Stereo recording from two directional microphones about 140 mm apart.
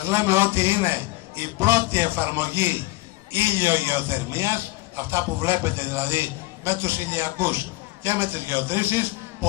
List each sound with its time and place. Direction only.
0.0 s a man's voice: 15° right (ahead or behind)